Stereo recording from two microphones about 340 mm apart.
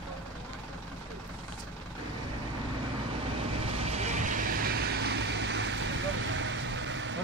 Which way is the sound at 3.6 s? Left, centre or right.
Centre.